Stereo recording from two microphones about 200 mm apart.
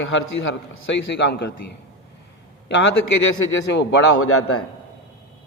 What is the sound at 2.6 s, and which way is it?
A man's voice, 70° left (ahead or behind).